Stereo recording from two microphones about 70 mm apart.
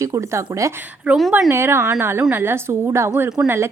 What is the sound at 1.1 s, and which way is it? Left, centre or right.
Speech, centre.